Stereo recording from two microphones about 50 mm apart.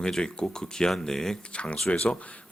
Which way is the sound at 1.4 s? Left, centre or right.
Centre.